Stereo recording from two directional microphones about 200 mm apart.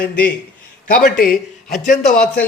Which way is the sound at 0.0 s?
45° left (ahead or behind).